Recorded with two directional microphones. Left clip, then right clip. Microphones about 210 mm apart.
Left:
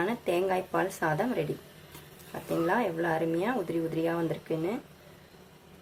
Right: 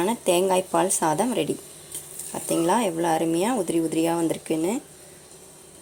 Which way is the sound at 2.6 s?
30° right (ahead or behind).